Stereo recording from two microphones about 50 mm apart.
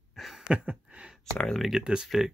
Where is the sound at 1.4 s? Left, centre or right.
Centre.